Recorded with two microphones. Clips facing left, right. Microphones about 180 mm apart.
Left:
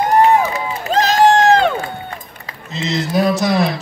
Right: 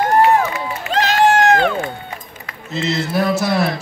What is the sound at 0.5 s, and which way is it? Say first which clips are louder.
Crowd: left 3 dB; 40° left (ahead or behind).